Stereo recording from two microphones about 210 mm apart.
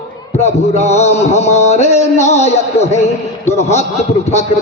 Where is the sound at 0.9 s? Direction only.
30° left (ahead or behind).